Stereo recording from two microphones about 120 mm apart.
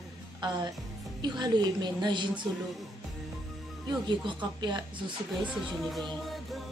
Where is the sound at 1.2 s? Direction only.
35° right (ahead or behind).